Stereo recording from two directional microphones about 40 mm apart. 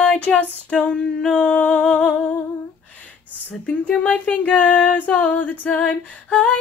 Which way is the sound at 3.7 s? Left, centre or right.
Left.